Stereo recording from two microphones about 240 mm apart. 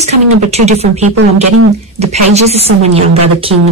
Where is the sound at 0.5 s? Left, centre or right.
Right.